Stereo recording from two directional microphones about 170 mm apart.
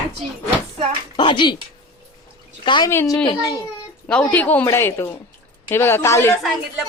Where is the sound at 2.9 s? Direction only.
15° left (ahead or behind).